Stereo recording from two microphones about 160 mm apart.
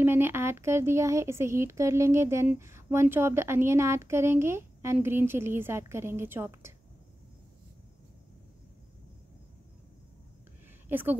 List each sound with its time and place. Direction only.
0.0 s speech: 15° right (ahead or behind)
10.9 s a woman's voice: 10° right (ahead or behind)